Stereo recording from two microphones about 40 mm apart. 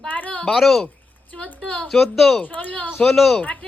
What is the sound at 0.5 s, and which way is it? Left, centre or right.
Speech, centre.